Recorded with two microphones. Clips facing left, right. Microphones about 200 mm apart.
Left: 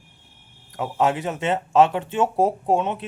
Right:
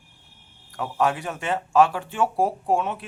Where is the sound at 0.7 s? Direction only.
20° left (ahead or behind).